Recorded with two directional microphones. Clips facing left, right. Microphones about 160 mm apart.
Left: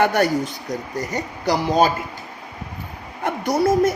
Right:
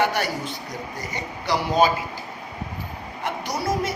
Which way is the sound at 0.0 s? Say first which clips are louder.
Left 6 dB; 50° left (ahead or behind).